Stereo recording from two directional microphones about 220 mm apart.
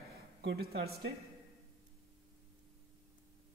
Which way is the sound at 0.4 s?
50° right (ahead or behind).